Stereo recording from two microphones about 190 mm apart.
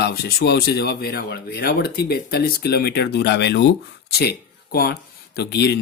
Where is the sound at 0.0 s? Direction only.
55° left (ahead or behind).